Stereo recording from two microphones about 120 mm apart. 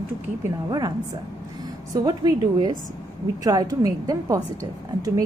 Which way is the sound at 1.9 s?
35° right (ahead or behind).